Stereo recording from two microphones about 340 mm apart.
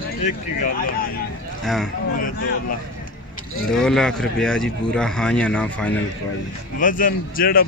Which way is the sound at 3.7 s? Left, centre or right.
Centre.